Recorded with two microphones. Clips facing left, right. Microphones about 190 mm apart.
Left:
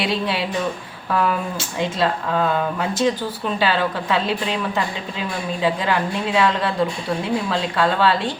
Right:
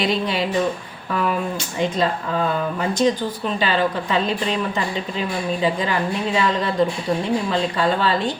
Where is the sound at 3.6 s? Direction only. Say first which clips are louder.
Even; centre (ahead or behind).